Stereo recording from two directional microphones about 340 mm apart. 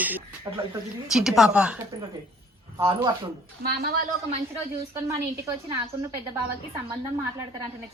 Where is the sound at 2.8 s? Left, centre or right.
Centre.